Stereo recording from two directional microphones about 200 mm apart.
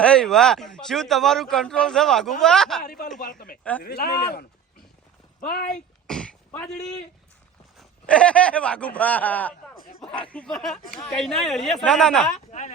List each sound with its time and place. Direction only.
0.0 s speech: 5° left (ahead or behind)
2.8 s speech: 50° left (ahead or behind)
3.6 s speech: 5° left (ahead or behind)
3.8 s speech: 55° left (ahead or behind)
5.7 s a sound: 5° left (ahead or behind)
8.0 s speech: 5° left (ahead or behind)
12.5 s speech: 35° left (ahead or behind)